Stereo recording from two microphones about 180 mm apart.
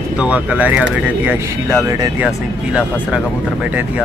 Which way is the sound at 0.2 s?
5° right (ahead or behind).